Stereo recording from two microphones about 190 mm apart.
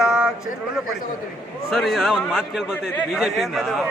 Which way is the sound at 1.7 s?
Centre (ahead or behind).